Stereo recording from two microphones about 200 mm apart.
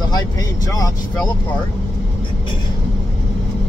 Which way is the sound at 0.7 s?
20° left (ahead or behind).